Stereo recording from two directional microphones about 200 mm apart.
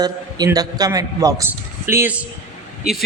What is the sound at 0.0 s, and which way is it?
A man's voice, 20° right (ahead or behind).